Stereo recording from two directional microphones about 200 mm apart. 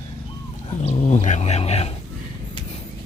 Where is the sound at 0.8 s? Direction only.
35° left (ahead or behind).